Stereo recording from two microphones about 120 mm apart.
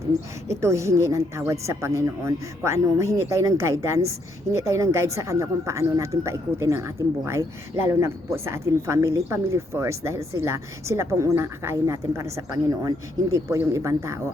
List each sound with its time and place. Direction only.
0.6 s speech: 25° right (ahead or behind)